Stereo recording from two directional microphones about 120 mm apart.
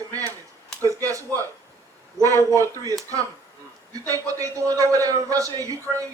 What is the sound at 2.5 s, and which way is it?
Speech, 25° right (ahead or behind).